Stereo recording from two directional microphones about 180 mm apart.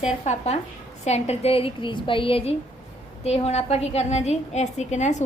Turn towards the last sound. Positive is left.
turn(degrees=40)  # may be behind; listen again after turning